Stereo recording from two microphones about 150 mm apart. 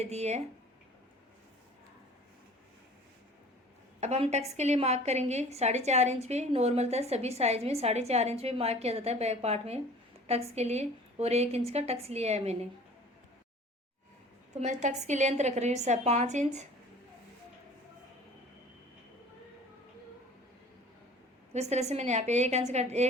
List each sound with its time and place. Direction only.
0.0 s a woman's voice: 45° right (ahead or behind)
4.0 s a woman's voice: 45° right (ahead or behind)
14.5 s a woman's voice: 50° right (ahead or behind)
21.5 s a woman's voice: 45° right (ahead or behind)